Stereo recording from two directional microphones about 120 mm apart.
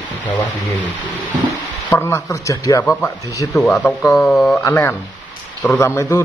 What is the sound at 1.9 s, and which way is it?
Speech, 25° left (ahead or behind).